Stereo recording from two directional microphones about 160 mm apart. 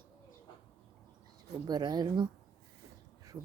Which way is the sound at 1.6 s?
25° right (ahead or behind).